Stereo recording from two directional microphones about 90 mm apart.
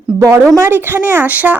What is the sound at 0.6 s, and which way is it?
Speech, 25° right (ahead or behind).